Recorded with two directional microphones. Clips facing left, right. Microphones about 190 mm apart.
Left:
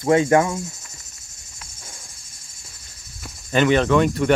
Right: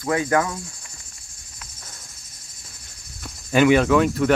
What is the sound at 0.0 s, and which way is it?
Cricket, 25° left (ahead or behind).